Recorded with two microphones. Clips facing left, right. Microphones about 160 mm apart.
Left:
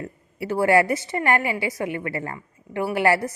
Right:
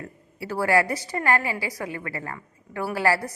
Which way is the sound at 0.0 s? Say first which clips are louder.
Left 5 dB; 25° left (ahead or behind).